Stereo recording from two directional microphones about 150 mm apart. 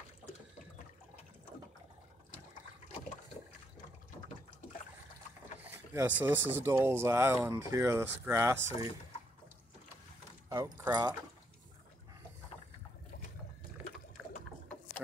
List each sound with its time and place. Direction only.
5.9 s speech: 10° right (ahead or behind)
10.5 s speech: 20° right (ahead or behind)